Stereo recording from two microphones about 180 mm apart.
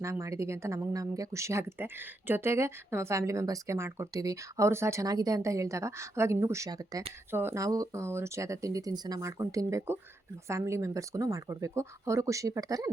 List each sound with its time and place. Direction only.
0.0 s speech: 15° right (ahead or behind)